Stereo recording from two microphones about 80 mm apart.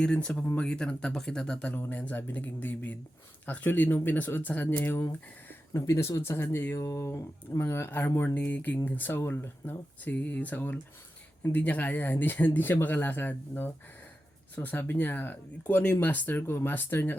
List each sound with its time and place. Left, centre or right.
0.0 s speech: centre
1.7 s speech: left
5.7 s speech: left
6.8 s speech: left